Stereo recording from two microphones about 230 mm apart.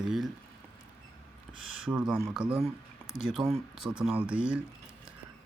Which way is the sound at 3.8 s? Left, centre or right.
Centre.